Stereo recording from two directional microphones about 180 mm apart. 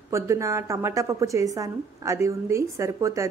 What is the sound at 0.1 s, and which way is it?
A woman's voice, 15° right (ahead or behind).